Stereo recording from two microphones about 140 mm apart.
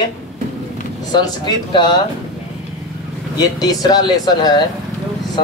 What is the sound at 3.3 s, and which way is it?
Speech, 25° left (ahead or behind).